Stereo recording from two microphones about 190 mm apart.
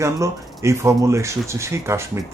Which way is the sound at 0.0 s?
15° right (ahead or behind).